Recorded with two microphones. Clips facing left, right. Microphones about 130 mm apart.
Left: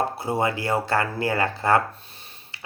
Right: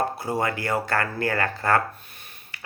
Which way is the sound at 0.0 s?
25° left (ahead or behind).